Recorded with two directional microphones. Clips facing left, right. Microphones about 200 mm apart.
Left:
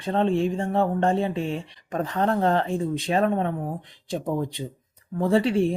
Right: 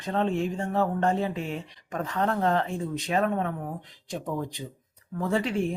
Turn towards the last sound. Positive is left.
turn(degrees=30)  # may be behind; listen again after turning